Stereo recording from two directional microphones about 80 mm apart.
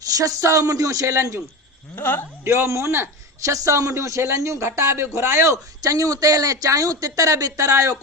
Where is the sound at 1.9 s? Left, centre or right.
Left.